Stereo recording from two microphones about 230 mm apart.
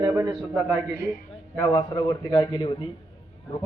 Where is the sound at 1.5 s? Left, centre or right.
Centre.